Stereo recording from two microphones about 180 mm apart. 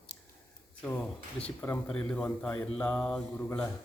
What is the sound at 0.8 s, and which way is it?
Speech, 5° left (ahead or behind).